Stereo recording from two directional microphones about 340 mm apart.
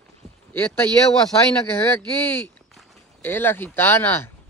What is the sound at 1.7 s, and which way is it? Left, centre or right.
Speech, centre.